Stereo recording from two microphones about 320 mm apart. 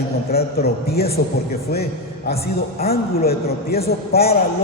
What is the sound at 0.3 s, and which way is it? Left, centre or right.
A man's voice, left.